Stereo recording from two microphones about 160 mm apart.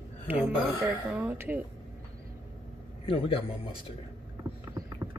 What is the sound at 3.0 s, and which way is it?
Speech, 35° left (ahead or behind).